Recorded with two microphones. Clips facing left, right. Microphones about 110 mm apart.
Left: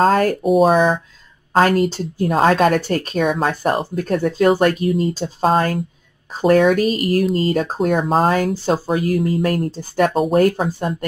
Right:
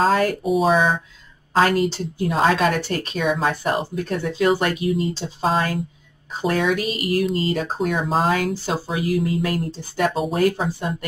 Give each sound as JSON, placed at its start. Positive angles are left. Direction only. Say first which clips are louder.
{"t": 0.1, "sound": "speech", "louder": "left 4 dB", "side_deg": 45}